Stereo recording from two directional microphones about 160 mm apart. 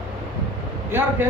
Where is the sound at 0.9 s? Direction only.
15° right (ahead or behind).